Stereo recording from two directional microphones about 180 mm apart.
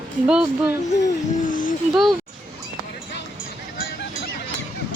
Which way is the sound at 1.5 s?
50° left (ahead or behind).